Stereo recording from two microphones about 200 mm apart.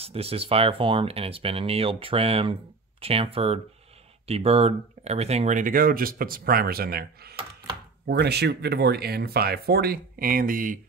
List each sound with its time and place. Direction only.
0.0 s speech: 30° right (ahead or behind)